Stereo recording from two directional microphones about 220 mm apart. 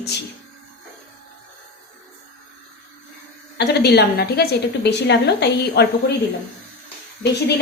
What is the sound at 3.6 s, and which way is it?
A woman's voice, 50° left (ahead or behind).